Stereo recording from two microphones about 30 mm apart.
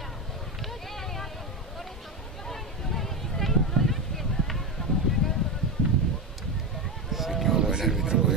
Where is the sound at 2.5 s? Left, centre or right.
Centre.